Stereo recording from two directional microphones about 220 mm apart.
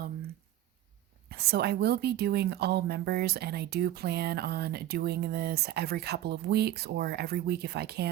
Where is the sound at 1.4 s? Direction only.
45° right (ahead or behind).